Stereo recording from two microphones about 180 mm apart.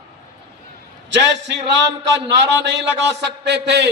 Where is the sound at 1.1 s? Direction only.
75° right (ahead or behind).